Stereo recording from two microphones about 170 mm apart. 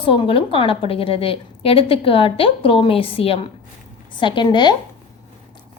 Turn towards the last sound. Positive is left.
turn(degrees=25)  # may be behind; listen again after turning